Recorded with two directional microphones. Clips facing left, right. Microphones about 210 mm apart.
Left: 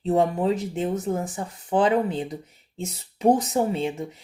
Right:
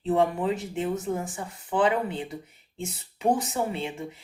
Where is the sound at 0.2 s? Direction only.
35° left (ahead or behind).